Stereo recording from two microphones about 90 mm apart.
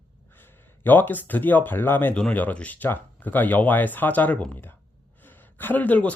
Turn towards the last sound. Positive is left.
turn(degrees=20)  # may be behind; listen again after turning